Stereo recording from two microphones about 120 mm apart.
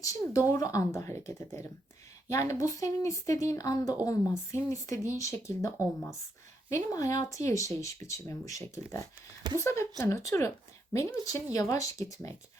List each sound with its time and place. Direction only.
0.0 s speech: 25° left (ahead or behind)
11.5 s speech: 30° left (ahead or behind)